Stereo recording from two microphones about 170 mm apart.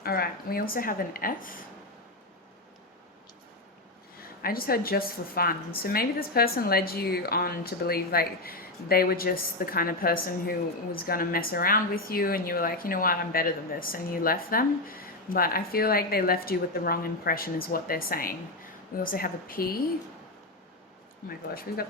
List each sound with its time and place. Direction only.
0.0 s a woman's voice: 65° left (ahead or behind)
4.4 s a woman's voice: 60° left (ahead or behind)
21.2 s a woman's voice: 60° left (ahead or behind)